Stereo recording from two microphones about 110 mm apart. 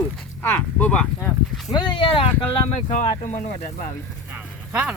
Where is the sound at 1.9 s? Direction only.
55° left (ahead or behind).